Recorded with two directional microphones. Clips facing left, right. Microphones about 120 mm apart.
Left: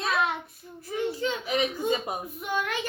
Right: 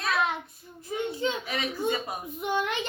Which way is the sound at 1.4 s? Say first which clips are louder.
Left 3 dB; 20° left (ahead or behind).